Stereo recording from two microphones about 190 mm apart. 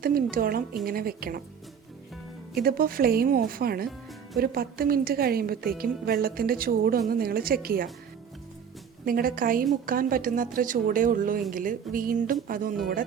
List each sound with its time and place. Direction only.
0.0 s a woman's voice: 50° right (ahead or behind)
2.6 s a woman's voice: 50° right (ahead or behind)
9.0 s a woman's voice: 50° right (ahead or behind)